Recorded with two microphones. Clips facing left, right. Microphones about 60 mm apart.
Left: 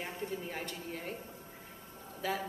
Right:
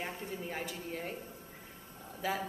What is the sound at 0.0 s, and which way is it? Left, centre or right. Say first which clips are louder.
Speech: left 1 dB; centre.